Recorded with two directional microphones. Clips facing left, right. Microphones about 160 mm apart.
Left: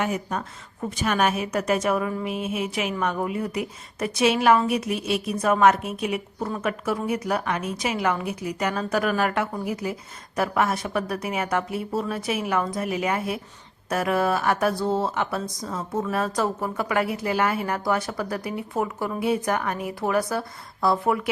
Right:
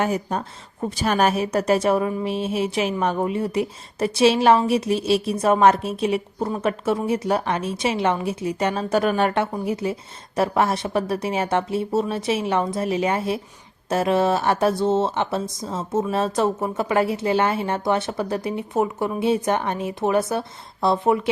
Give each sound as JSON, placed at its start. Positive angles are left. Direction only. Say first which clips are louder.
{"t": 0.0, "sound": "a woman's voice", "louder": "right 3 dB", "side_deg": -30}